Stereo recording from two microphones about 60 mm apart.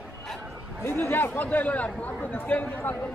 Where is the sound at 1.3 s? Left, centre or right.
Left.